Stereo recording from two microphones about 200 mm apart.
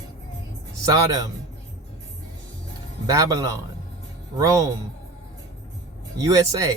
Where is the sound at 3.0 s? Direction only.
15° right (ahead or behind).